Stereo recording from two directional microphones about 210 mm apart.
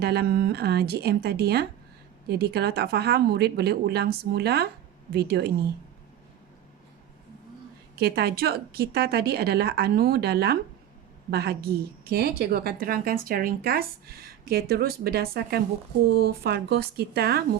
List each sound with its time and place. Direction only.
0.0 s a woman's voice: 50° right (ahead or behind)
7.9 s a woman's voice: 50° right (ahead or behind)